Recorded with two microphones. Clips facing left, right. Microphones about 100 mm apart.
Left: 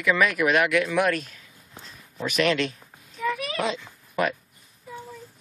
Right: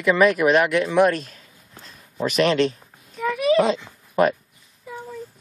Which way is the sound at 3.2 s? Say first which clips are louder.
Right 9 dB; centre (ahead or behind).